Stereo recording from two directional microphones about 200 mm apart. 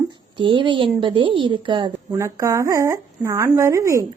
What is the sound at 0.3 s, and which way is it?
A woman's voice, 25° right (ahead or behind).